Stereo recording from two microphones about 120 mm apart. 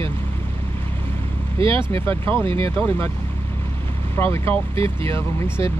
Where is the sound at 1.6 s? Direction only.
50° right (ahead or behind).